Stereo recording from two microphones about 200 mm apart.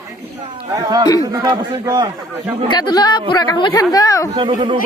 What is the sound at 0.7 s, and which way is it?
Speech, 20° right (ahead or behind).